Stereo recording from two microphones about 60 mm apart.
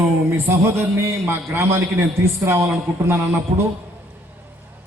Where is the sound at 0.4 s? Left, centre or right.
Right.